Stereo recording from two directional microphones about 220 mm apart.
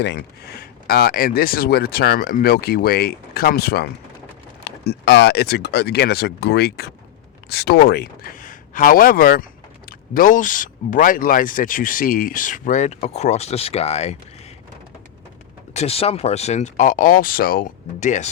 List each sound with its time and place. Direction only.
0.0 s speech: 45° left (ahead or behind); by 14.2 s 30° left (ahead or behind)
15.7 s speech: 30° left (ahead or behind)